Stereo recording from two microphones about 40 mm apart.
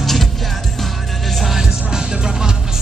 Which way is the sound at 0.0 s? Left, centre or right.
Centre.